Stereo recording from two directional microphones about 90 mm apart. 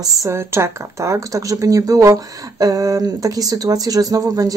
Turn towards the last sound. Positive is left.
turn(degrees=-45)  # may be behind; listen again after turning